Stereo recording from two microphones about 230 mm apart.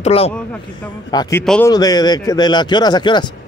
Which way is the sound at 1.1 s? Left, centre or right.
Centre.